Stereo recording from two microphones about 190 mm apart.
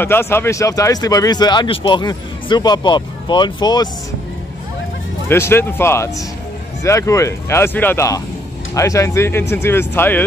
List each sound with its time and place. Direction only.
0.0 s speech: 10° left (ahead or behind)
5.3 s speech: 10° left (ahead or behind)